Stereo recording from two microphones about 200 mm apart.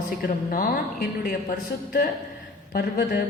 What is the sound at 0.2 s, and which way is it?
A woman's voice, 45° left (ahead or behind).